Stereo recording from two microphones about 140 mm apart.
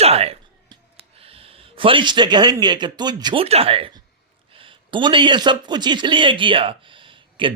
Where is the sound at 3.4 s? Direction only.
45° right (ahead or behind).